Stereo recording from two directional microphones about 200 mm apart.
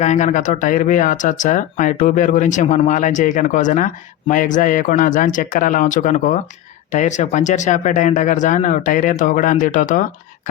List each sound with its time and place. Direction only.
0.0 s speech: 35° left (ahead or behind)